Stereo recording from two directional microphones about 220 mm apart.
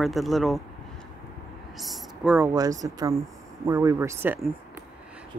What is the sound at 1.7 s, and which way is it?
Speech, centre (ahead or behind).